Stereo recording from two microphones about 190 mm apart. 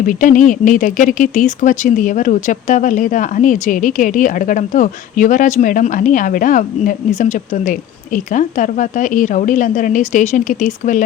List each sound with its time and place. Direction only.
0.0 s speech: 45° left (ahead or behind)